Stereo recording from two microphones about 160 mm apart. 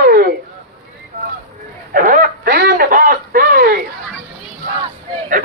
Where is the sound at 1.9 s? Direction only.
60° right (ahead or behind).